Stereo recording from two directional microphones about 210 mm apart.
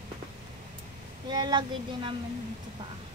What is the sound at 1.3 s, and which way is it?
Speech, 20° right (ahead or behind).